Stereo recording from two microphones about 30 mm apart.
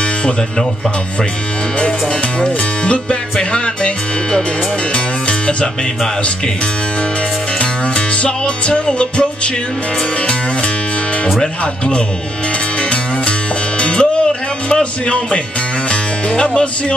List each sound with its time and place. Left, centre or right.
2.4 s music: left
8.8 s music: left
13.7 s music: left
14.7 s speech: left
15.9 s music: left